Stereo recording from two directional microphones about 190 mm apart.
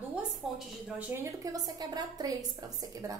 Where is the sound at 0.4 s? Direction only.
Centre (ahead or behind).